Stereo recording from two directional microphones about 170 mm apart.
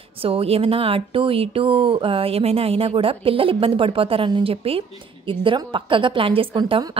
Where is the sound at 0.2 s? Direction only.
35° right (ahead or behind).